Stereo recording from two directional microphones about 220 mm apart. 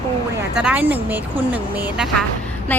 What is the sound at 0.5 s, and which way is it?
Speech, 5° right (ahead or behind).